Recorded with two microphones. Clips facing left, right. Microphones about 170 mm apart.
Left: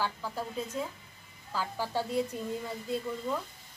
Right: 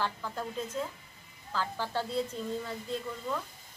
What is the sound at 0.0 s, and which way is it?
Speech, 10° left (ahead or behind).